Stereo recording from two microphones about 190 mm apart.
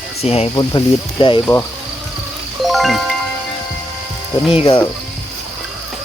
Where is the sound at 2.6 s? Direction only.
Centre (ahead or behind).